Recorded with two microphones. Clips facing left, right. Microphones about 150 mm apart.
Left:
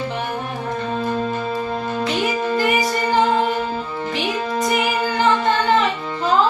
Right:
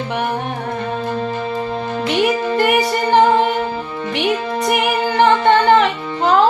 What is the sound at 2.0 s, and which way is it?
Music, 65° right (ahead or behind).